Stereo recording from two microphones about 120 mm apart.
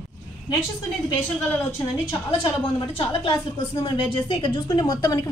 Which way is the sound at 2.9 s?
45° left (ahead or behind).